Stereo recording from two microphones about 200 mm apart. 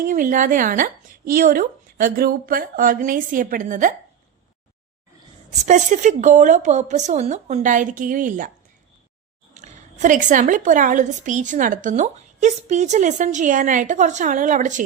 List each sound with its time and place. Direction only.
0.0 s speech: 45° right (ahead or behind)
5.6 s a woman's voice: 35° right (ahead or behind)
9.6 s a woman's voice: 40° right (ahead or behind)